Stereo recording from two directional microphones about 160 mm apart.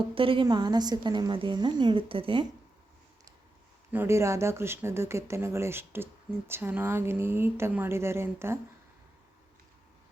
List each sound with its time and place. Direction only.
0.0 s a woman's voice: 35° right (ahead or behind)
3.9 s speech: 15° right (ahead or behind)